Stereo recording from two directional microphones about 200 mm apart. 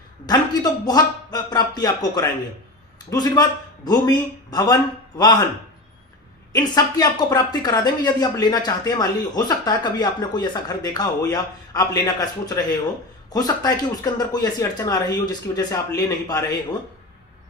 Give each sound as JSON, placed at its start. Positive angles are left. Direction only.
{"t": 0.3, "sound": "speech", "side_deg": 20}
{"t": 6.5, "sound": "speech", "side_deg": 20}